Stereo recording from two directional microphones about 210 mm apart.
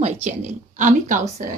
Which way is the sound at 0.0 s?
35° right (ahead or behind).